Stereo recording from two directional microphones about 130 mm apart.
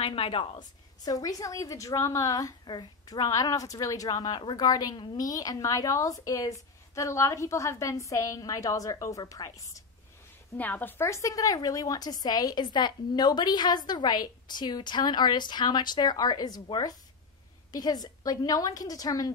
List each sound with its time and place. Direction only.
0.0 s a woman's voice: 45° left (ahead or behind); by 9.8 s 25° left (ahead or behind)
10.6 s a woman's voice: 15° left (ahead or behind)